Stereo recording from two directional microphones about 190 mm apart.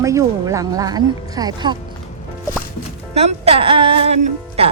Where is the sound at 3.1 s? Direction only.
35° right (ahead or behind).